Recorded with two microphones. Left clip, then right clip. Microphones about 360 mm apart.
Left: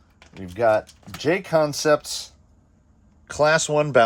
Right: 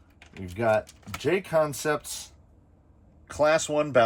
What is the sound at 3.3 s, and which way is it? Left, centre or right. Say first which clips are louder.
Speech: left 4 dB; left.